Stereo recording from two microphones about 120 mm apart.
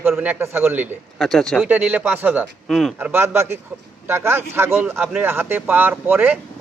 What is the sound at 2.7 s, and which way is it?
Speech, centre (ahead or behind).